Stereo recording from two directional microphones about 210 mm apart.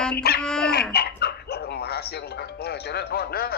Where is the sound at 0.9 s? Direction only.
50° left (ahead or behind).